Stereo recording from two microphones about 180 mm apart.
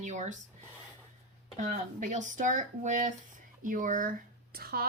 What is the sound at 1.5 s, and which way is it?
Speech, 40° right (ahead or behind).